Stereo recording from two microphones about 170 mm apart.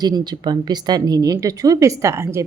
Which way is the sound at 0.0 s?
25° right (ahead or behind).